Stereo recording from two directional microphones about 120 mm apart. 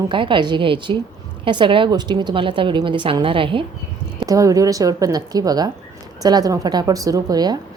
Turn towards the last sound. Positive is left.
turn(degrees=-35)  # may be behind; listen again after turning